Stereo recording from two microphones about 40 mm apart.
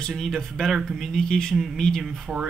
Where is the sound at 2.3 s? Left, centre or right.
Centre.